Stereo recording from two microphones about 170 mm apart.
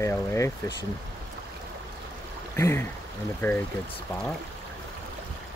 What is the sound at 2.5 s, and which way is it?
Stream, 15° left (ahead or behind).